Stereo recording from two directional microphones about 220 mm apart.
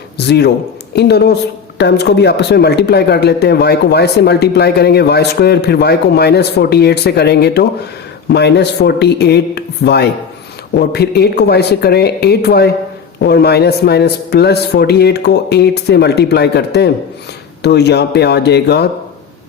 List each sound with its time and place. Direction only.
0.2 s speech: 50° left (ahead or behind)